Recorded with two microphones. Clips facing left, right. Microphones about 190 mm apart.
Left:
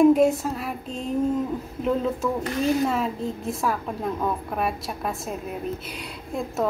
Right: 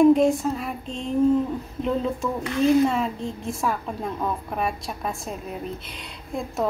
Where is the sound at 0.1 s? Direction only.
5° left (ahead or behind).